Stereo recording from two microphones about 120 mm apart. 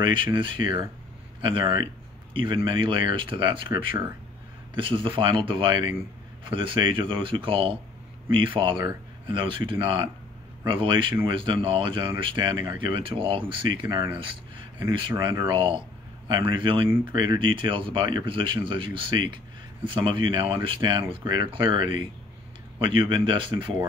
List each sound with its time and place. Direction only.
0.0 s speech: 40° right (ahead or behind)